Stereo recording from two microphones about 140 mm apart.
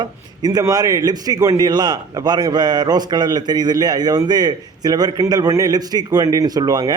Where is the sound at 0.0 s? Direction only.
30° right (ahead or behind).